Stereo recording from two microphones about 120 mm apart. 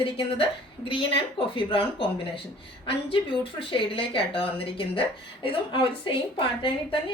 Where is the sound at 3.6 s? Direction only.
45° left (ahead or behind).